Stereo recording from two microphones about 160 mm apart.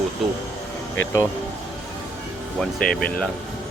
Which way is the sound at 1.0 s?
20° left (ahead or behind).